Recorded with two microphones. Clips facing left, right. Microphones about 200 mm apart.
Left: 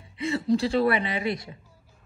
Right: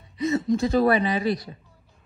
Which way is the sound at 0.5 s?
30° left (ahead or behind).